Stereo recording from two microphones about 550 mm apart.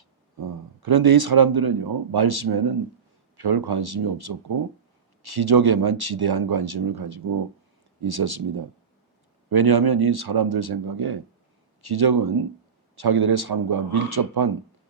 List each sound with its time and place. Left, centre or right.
0.3 s speech: right